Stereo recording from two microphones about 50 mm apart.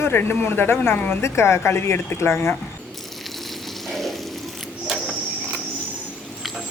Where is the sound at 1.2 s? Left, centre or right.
Left.